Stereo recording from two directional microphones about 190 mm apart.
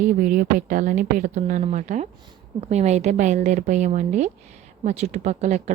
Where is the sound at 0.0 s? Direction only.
45° right (ahead or behind).